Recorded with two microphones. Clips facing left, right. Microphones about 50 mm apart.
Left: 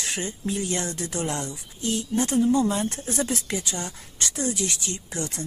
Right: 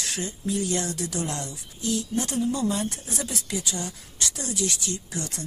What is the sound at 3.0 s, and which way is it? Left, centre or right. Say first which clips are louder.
Speech: left 5 dB; left.